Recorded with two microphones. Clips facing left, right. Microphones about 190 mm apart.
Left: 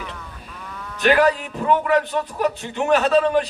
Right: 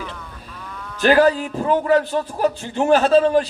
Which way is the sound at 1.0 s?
35° right (ahead or behind).